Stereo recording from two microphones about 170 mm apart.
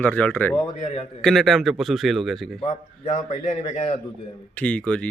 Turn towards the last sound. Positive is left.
turn(degrees=10)  # may be behind; listen again after turning